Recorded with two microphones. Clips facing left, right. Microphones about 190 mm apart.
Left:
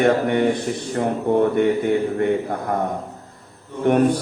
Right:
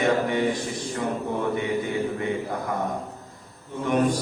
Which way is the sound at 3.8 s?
60° left (ahead or behind).